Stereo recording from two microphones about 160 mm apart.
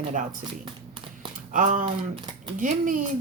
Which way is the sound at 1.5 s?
55° right (ahead or behind).